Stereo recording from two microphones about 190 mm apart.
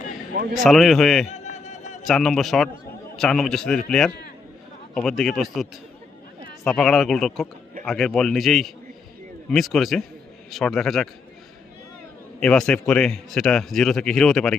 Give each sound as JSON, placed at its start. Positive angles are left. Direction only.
{"t": 0.5, "sound": "a man's voice", "side_deg": 0}
{"t": 1.3, "sound": "a sound", "side_deg": 35}
{"t": 2.0, "sound": "a man's voice", "side_deg": 0}
{"t": 6.7, "sound": "a man's voice", "side_deg": 0}
{"t": 12.4, "sound": "a man's voice", "side_deg": 5}